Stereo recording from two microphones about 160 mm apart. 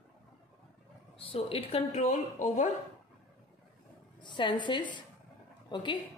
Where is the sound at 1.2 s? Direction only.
35° left (ahead or behind).